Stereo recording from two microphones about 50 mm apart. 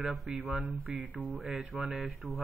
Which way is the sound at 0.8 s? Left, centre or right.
Right.